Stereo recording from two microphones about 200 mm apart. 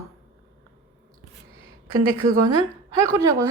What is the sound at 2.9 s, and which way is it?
Speech, 15° right (ahead or behind).